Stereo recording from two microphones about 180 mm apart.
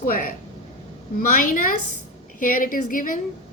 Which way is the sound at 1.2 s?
50° left (ahead or behind).